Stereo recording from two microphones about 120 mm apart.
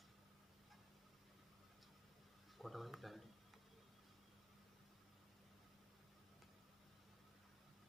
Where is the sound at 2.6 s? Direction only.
Centre (ahead or behind).